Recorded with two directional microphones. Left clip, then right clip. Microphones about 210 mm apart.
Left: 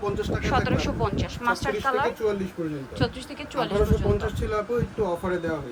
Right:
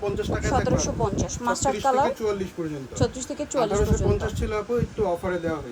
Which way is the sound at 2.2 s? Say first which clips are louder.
Even; 5° right (ahead or behind).